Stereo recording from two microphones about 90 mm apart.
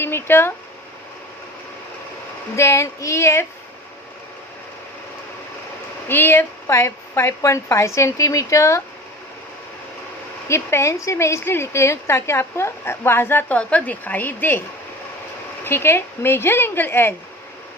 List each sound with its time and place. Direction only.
0.0 s a sound: 25° left (ahead or behind)
2.6 s speech: 35° left (ahead or behind)
6.1 s speech: 25° left (ahead or behind)
10.5 s speech: 30° left (ahead or behind)
13.6 s speech: 15° left (ahead or behind)
15.6 s speech: 25° left (ahead or behind)